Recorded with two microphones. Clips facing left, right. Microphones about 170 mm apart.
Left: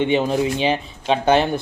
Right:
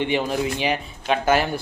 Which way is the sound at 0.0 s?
20° left (ahead or behind).